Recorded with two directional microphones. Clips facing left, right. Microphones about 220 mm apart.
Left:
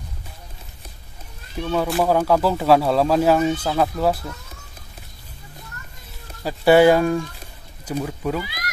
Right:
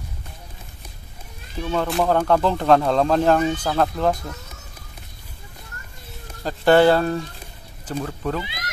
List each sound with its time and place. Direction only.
1.6 s speech: 5° left (ahead or behind)
6.4 s speech: 10° left (ahead or behind)
8.4 s speech: 25° right (ahead or behind)